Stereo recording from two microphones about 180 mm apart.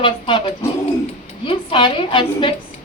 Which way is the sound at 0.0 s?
25° left (ahead or behind).